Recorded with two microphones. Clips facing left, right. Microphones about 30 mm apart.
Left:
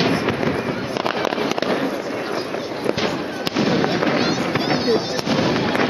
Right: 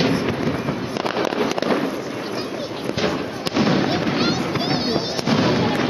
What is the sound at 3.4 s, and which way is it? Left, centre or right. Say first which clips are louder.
Fireworks: even; centre.